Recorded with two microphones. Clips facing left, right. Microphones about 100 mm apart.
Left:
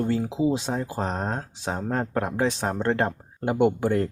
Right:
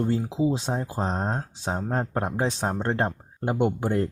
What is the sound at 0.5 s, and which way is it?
Speech, 30° right (ahead or behind).